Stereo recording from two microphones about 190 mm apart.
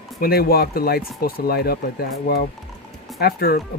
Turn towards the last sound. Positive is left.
turn(degrees=55)  # may be behind; listen again after turning